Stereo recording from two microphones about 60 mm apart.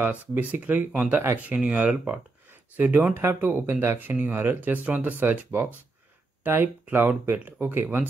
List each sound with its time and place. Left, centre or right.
0.0 s speech: right
3.2 s speech: right
4.0 s speech: right